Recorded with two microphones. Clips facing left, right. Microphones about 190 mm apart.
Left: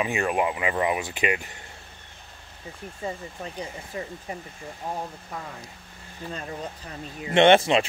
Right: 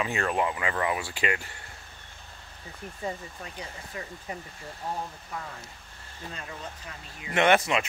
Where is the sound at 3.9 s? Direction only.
25° left (ahead or behind).